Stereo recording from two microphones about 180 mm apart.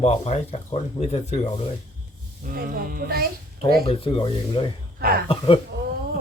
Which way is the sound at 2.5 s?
55° right (ahead or behind).